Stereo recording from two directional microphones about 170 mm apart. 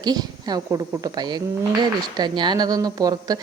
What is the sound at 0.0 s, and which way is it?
Speech, 25° right (ahead or behind).